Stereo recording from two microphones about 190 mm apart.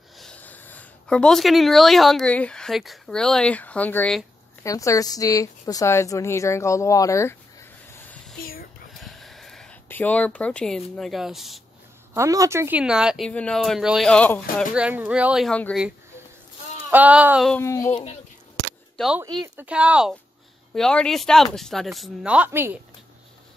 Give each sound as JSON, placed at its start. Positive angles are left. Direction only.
{"t": 0.2, "sound": "a woman's voice", "side_deg": 5}
{"t": 8.9, "sound": "a sound", "side_deg": 0}
{"t": 12.1, "sound": "speech", "side_deg": -15}
{"t": 14.6, "sound": "speech", "side_deg": -5}
{"t": 16.9, "sound": "speech", "side_deg": -10}
{"t": 17.5, "sound": "a woman's voice", "side_deg": 15}
{"t": 18.9, "sound": "speech", "side_deg": 0}
{"t": 19.2, "sound": "speech", "side_deg": -20}
{"t": 19.5, "sound": "speech", "side_deg": -5}